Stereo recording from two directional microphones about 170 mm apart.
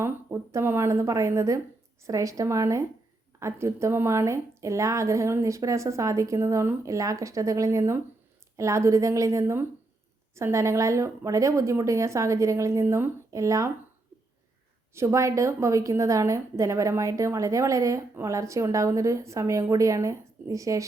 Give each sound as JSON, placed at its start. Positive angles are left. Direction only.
{"t": 0.0, "sound": "a woman's voice", "side_deg": -15}
{"t": 14.9, "sound": "a woman's voice", "side_deg": -15}